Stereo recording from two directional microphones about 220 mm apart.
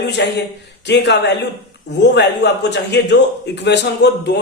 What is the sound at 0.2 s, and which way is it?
A man's voice, 50° left (ahead or behind).